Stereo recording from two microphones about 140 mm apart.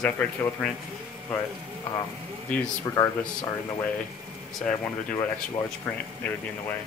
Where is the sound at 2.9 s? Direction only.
20° left (ahead or behind).